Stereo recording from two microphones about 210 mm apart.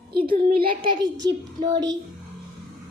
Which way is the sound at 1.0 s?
20° right (ahead or behind).